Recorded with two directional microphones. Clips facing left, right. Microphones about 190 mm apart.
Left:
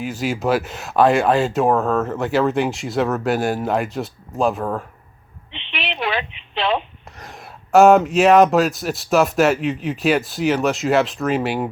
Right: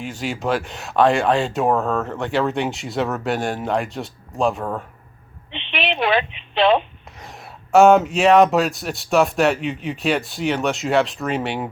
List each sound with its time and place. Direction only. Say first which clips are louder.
0.0 s speech: left 3 dB; 5° left (ahead or behind)
5.7 s telephone: right 4 dB; 60° right (ahead or behind)
7.2 s speech: left 1 dB; centre (ahead or behind)